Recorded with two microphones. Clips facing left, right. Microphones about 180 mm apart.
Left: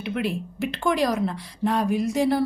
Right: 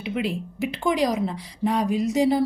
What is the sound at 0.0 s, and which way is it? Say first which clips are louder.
A woman's voice: even; 15° right (ahead or behind).